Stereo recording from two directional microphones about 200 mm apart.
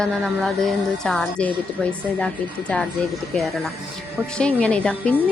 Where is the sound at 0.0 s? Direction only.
5° left (ahead or behind).